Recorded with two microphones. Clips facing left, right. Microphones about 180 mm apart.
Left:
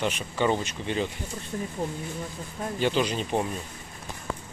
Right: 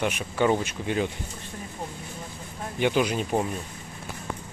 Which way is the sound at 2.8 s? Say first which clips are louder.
Right 2 dB; 10° right (ahead or behind).